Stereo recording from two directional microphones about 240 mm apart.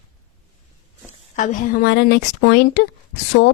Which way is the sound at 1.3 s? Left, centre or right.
Left.